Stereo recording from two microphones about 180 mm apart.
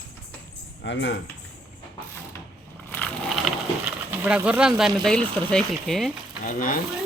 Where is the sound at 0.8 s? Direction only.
75° left (ahead or behind).